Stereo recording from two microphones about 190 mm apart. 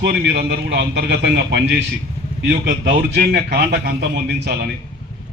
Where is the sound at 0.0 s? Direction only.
60° right (ahead or behind).